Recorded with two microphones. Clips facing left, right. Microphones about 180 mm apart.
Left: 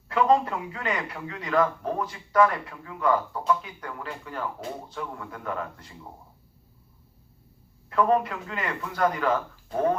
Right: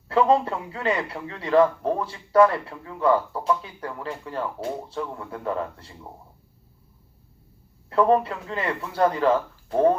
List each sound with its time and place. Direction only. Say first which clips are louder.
0.1 s a man's voice: right 2 dB; 30° right (ahead or behind)
7.9 s a man's voice: right 3 dB; 30° right (ahead or behind)